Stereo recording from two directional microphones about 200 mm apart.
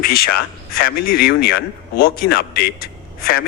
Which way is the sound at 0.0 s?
50° left (ahead or behind).